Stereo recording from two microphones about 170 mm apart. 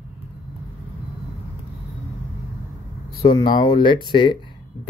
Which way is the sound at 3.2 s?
25° left (ahead or behind).